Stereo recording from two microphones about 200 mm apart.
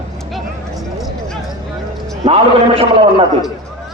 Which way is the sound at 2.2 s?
30° right (ahead or behind).